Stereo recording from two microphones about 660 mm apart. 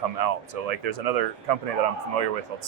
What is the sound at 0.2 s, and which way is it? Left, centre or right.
Speech, right.